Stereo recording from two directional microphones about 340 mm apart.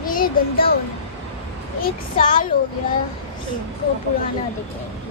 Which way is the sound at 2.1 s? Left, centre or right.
Left.